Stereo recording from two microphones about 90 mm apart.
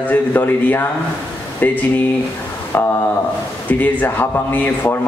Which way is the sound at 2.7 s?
25° left (ahead or behind).